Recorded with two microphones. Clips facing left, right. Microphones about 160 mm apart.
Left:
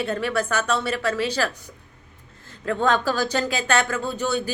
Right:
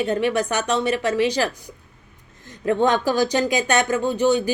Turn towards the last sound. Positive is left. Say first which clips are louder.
# right 6 dB
turn(degrees=-15)  # may be behind; listen again after turning